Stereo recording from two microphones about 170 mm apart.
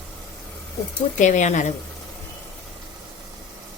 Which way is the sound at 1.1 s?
45° left (ahead or behind).